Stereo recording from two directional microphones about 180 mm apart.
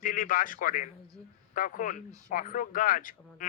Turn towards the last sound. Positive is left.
turn(degrees=50)  # may be behind; listen again after turning